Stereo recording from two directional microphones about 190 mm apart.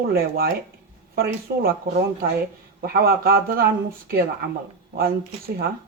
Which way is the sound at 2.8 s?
50° right (ahead or behind).